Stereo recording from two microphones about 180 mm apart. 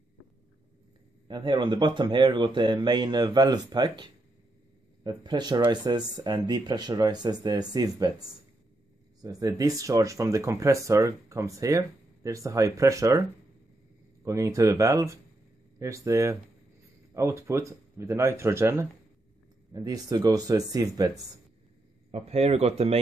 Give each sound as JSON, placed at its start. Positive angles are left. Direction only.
{"t": 1.2, "sound": "speech", "side_deg": -25}
{"t": 9.2, "sound": "speech", "side_deg": -20}
{"t": 14.2, "sound": "speech", "side_deg": -15}
{"t": 22.1, "sound": "speech", "side_deg": -35}